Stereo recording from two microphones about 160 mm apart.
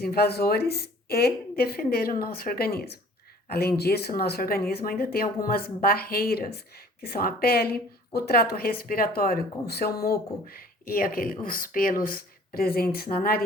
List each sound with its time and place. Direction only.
0.0 s a woman's voice: 75° left (ahead or behind)